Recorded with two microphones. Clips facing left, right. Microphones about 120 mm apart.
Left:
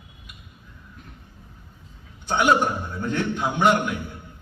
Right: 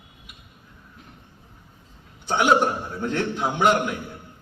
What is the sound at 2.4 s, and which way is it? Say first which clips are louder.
A man's voice: right 1 dB; 25° right (ahead or behind).